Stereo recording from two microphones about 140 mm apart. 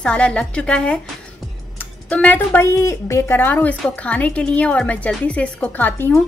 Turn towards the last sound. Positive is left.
turn(degrees=15)  # may be behind; listen again after turning